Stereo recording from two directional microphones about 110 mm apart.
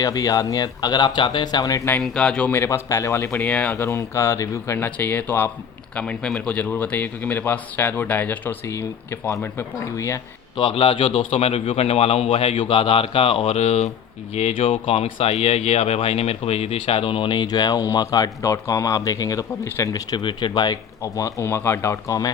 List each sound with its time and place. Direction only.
0.0 s speech: 35° left (ahead or behind)
2.0 s speech: 10° left (ahead or behind)
2.5 s speech: 25° left (ahead or behind)
3.8 s speech: 25° left (ahead or behind)
10.6 s a man's voice: 55° left (ahead or behind); by 19.5 s 35° left (ahead or behind)
19.6 s speech: 20° left (ahead or behind)
19.9 s speech: 40° left (ahead or behind)
21.0 s speech: 30° left (ahead or behind)